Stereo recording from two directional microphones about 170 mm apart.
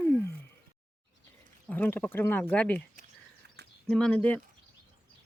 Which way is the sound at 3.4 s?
75° right (ahead or behind).